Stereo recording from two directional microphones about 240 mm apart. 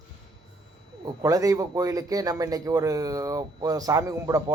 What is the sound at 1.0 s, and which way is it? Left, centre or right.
Speech, centre.